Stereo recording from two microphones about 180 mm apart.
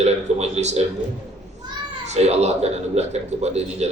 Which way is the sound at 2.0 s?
40° right (ahead or behind).